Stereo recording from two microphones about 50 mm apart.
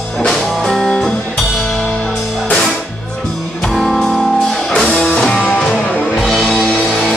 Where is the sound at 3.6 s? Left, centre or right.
Centre.